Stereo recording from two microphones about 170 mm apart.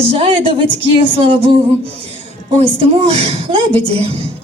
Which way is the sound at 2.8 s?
35° right (ahead or behind).